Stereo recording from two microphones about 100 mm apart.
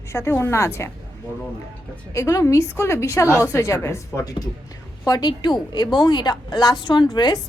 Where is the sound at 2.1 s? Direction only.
35° left (ahead or behind).